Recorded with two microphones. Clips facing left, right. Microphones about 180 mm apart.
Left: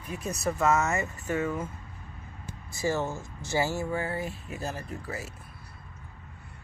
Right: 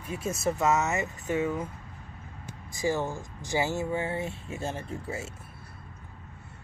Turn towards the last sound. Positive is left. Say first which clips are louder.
# right 2 dB
turn(degrees=-25)  # may be behind; listen again after turning